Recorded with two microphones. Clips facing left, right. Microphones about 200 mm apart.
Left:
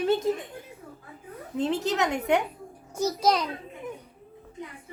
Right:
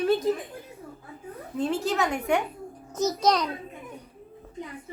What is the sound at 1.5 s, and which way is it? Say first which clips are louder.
Speech: even; 20° left (ahead or behind).